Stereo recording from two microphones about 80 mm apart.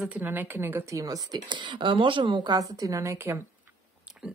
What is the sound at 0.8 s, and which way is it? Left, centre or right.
Speech, right.